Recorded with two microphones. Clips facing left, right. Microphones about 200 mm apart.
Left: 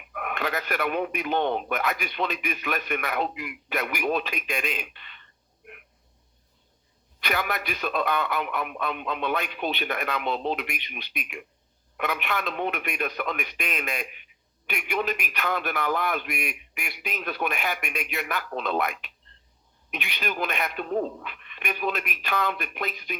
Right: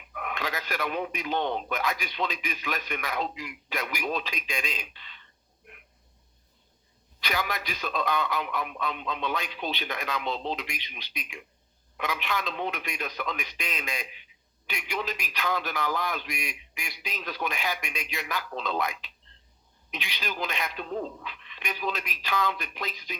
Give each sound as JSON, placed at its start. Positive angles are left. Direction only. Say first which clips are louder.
{"t": 0.1, "sound": "a man's voice", "louder": "left 4 dB", "side_deg": 55}
{"t": 7.2, "sound": "a man's voice", "louder": "left 3 dB", "side_deg": 55}